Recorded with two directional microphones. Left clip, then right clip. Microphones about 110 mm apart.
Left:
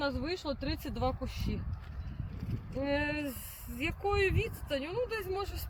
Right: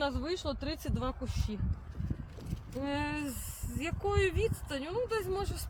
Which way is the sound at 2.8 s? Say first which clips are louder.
Left 3 dB; 25° right (ahead or behind).